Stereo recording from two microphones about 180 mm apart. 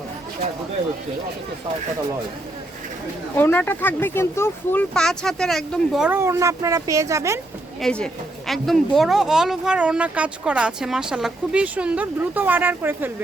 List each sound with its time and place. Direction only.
3.3 s speech: 10° left (ahead or behind)
6.1 s speech: 15° right (ahead or behind)
7.8 s a woman's voice: 5° left (ahead or behind); by 13.1 s 10° right (ahead or behind)